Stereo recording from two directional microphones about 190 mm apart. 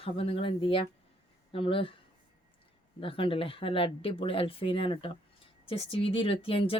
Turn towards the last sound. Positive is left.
turn(degrees=30)  # may be behind; listen again after turning